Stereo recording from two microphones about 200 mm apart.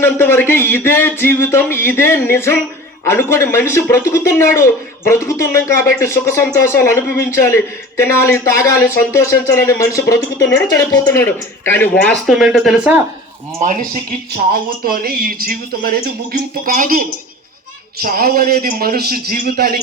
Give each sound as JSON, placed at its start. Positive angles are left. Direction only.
{"t": 0.0, "sound": "speech", "side_deg": 10}
{"t": 12.2, "sound": "speech", "side_deg": -5}
{"t": 13.6, "sound": "speech", "side_deg": -40}